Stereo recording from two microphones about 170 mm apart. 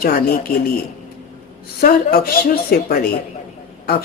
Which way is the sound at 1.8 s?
60° left (ahead or behind).